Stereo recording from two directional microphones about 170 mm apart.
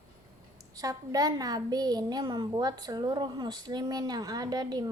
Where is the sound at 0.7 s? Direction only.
20° right (ahead or behind).